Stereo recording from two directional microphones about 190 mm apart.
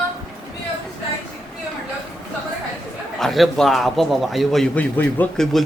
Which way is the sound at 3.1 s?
Centre (ahead or behind).